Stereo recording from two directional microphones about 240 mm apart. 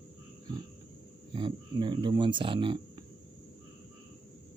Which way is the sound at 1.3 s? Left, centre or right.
Centre.